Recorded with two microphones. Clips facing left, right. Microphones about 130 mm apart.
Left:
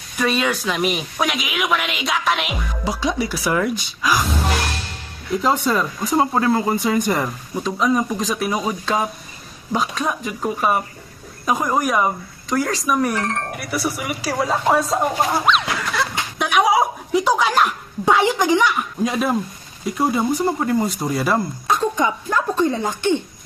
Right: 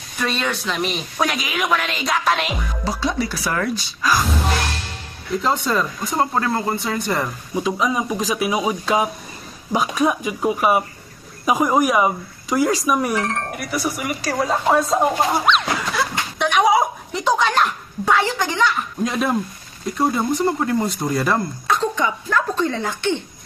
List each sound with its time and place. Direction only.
0.2 s speech: 5° left (ahead or behind)
2.8 s speech: 15° left (ahead or behind)
5.4 s speech: 5° left (ahead or behind)
7.6 s speech: 5° right (ahead or behind)
16.4 s a sound: 5° left (ahead or behind)
18.0 s speech: 15° left (ahead or behind)
19.0 s speech: centre (ahead or behind)
21.7 s speech: 20° left (ahead or behind)